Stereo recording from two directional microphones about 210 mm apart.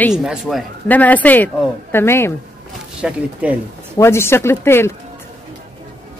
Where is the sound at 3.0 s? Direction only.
5° right (ahead or behind).